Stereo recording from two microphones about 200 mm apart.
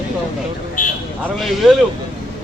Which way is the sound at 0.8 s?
40° left (ahead or behind).